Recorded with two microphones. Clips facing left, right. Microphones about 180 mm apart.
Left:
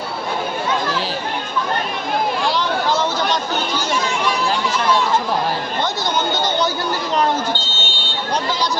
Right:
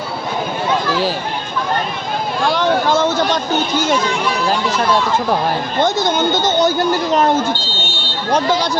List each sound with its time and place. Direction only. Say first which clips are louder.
2.5 s a sound: right 4 dB; 50° right (ahead or behind)
5.8 s speech: right 7 dB; 50° right (ahead or behind)
8.3 s speech: right 6 dB; 50° right (ahead or behind)